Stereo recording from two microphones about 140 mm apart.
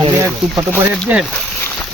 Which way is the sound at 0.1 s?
15° right (ahead or behind).